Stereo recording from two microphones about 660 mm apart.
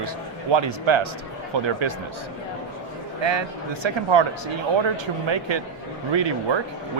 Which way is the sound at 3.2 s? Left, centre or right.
Right.